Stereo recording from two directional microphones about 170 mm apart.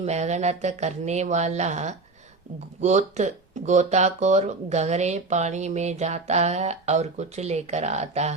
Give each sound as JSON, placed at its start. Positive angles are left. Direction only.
{"t": 0.0, "sound": "speech", "side_deg": -40}